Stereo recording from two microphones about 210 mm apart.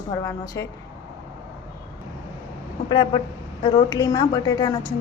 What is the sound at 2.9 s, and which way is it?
A woman's voice, 20° left (ahead or behind).